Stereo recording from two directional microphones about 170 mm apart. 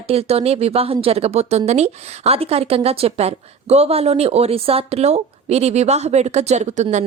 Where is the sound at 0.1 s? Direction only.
35° right (ahead or behind).